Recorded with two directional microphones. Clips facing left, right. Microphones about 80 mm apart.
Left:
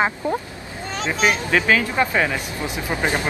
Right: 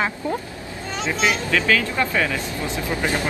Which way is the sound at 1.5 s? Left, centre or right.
Left.